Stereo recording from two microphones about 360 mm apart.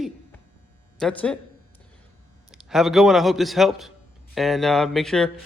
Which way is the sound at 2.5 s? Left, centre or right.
Centre.